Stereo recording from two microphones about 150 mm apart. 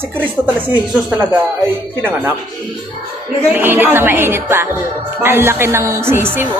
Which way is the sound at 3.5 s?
15° right (ahead or behind).